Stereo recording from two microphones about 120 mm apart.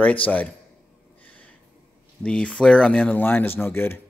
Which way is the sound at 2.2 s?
10° left (ahead or behind).